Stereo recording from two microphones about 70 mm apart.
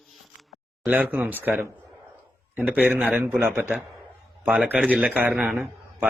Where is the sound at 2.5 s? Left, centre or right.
Right.